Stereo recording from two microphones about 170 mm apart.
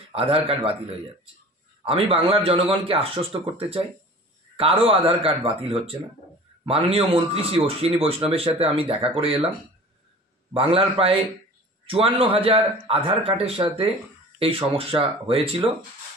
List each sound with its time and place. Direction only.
0.1 s speech: 35° right (ahead or behind)
4.6 s speech: 35° right (ahead or behind)
10.5 s speech: 35° right (ahead or behind)